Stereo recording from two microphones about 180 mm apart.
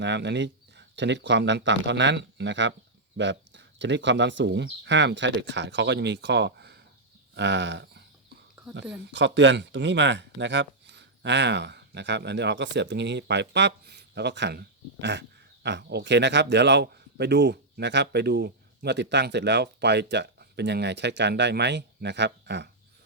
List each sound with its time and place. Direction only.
0.0 s speech: 75° right (ahead or behind)
7.3 s a sound: 75° right (ahead or behind)
9.1 s speech: 90° right; by 22.7 s 75° right (ahead or behind)